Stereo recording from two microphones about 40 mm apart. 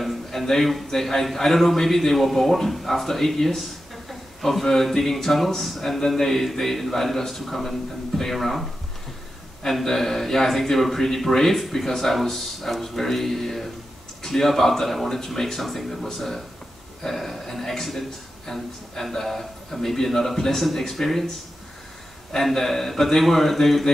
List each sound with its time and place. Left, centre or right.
0.0 s a sound: centre
0.5 s a man's voice: centre
9.7 s a man's voice: centre
22.3 s a man's voice: centre